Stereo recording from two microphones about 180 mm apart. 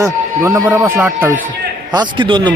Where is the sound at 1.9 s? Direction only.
25° right (ahead or behind).